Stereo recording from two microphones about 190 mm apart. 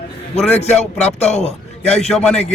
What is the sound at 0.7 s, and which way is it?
Speech, 5° left (ahead or behind).